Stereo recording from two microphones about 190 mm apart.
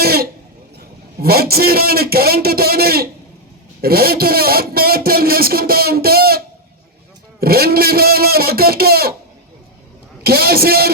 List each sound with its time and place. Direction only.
0.0 s a sound: 55° right (ahead or behind)
1.2 s a man's voice: 55° right (ahead or behind)
10.2 s a man's voice: 55° right (ahead or behind)